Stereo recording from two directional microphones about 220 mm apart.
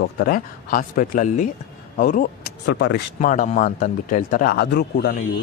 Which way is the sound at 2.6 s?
50° left (ahead or behind).